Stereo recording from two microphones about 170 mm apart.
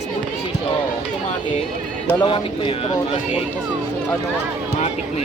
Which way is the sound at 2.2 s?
30° left (ahead or behind).